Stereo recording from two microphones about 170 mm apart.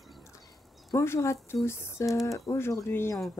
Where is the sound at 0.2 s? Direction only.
20° left (ahead or behind).